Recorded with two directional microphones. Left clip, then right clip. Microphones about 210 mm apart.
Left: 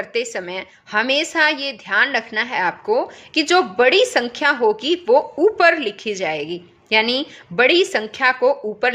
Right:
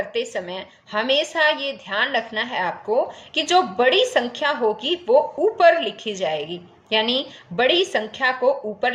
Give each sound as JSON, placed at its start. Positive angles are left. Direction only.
{"t": 0.0, "sound": "a woman's voice", "side_deg": 45}